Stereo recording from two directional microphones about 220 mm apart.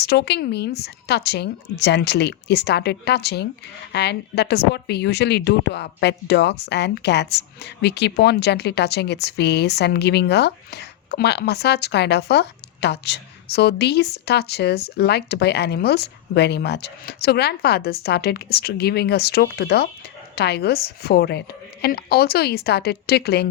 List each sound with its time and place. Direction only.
0.0 s a woman's voice: 50° left (ahead or behind)